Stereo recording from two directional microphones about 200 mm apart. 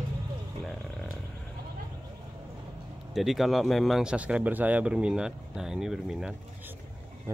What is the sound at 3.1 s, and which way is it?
Speech, centre (ahead or behind).